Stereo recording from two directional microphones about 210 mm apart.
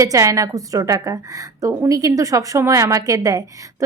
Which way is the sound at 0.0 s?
15° right (ahead or behind).